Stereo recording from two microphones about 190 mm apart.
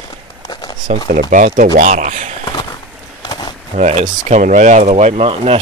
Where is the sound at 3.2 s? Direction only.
20° left (ahead or behind).